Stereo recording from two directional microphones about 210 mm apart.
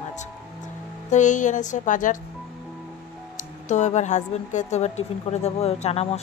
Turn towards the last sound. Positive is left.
turn(degrees=30)  # may be behind; listen again after turning